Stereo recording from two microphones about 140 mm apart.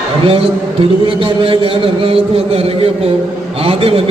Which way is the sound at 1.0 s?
40° right (ahead or behind).